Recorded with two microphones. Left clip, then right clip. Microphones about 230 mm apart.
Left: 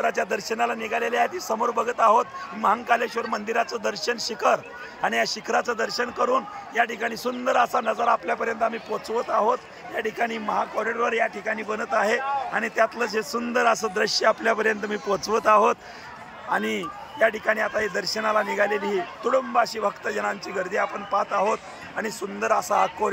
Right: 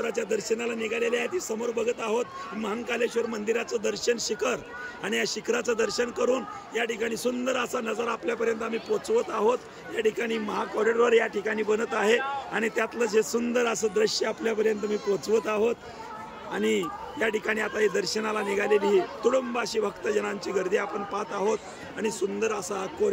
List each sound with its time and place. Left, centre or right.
0.0 s a man's voice: centre